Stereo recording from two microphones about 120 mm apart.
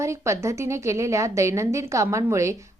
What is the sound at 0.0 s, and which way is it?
A woman's voice, 25° right (ahead or behind).